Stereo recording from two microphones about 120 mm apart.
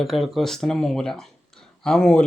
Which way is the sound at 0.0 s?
Centre (ahead or behind).